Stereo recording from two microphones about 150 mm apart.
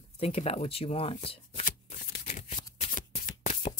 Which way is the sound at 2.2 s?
50° left (ahead or behind).